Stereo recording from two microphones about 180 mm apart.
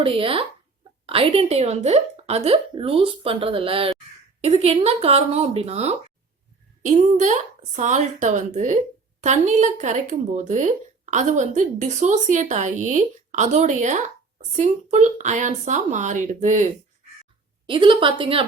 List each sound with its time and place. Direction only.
0.0 s a woman's voice: 30° right (ahead or behind)
17.7 s a woman's voice: 30° right (ahead or behind)